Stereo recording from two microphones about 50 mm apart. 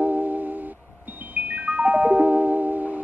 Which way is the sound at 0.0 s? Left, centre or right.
Right.